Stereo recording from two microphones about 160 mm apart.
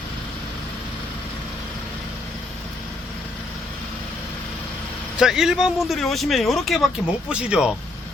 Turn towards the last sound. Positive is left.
turn(degrees=-5)  # may be behind; listen again after turning